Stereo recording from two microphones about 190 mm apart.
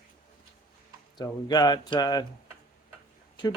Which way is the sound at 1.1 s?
20° left (ahead or behind).